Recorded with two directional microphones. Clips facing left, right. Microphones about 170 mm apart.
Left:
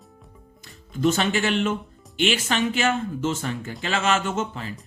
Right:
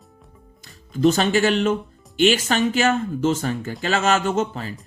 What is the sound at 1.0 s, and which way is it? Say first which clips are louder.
Speech: right 4 dB; 35° right (ahead or behind).